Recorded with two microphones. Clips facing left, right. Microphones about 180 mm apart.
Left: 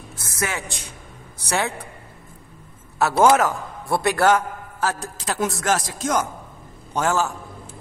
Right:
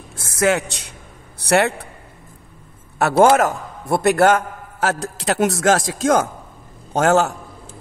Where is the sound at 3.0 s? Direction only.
60° right (ahead or behind); by 6.1 s 90° right.